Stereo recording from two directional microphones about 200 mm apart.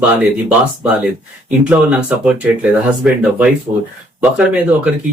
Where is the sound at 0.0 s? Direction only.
10° right (ahead or behind).